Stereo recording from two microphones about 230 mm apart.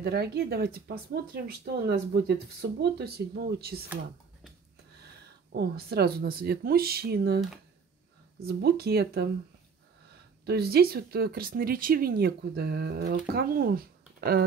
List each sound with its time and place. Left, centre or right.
0.0 s speech: right
5.5 s speech: right
8.5 s speech: right
10.4 s speech: right